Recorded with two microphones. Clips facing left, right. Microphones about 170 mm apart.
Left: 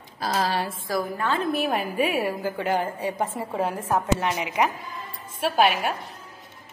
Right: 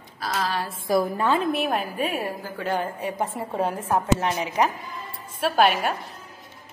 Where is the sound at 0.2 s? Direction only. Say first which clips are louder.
Left 2 dB; 30° left (ahead or behind).